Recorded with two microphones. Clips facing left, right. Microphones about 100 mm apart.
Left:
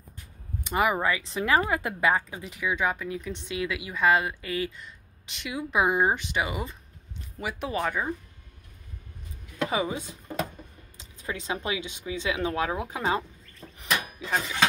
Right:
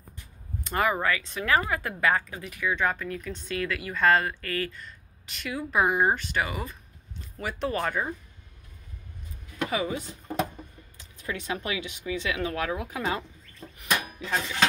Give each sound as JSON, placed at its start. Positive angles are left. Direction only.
{"t": 0.7, "sound": "speech", "side_deg": 15}
{"t": 3.2, "sound": "speech", "side_deg": 20}
{"t": 7.3, "sound": "speech", "side_deg": 10}
{"t": 9.7, "sound": "speech", "side_deg": 20}